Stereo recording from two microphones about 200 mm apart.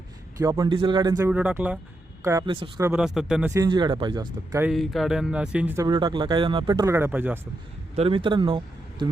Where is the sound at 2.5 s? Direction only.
25° right (ahead or behind).